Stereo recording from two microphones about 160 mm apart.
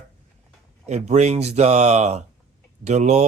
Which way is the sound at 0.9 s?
45° right (ahead or behind).